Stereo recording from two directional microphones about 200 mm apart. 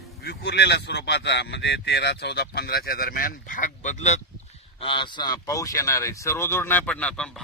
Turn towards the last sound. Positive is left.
turn(degrees=5)  # may be behind; listen again after turning